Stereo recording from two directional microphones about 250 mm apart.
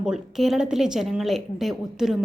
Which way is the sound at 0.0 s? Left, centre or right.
Centre.